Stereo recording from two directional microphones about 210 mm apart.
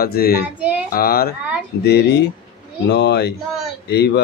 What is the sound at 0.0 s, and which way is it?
Speech, 45° left (ahead or behind).